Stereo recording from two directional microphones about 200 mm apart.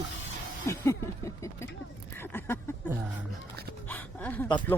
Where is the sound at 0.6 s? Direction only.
15° left (ahead or behind).